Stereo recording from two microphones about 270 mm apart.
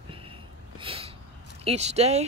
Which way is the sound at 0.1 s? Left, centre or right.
Centre.